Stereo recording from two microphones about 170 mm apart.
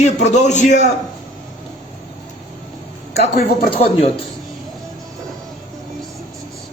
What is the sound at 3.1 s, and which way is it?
Speech, 40° left (ahead or behind).